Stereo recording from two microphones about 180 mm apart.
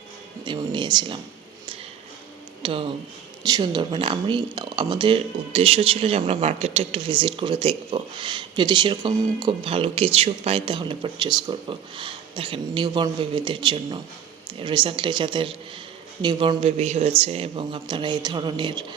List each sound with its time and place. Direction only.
0.4 s speech: 25° right (ahead or behind)
2.6 s speech: 30° right (ahead or behind)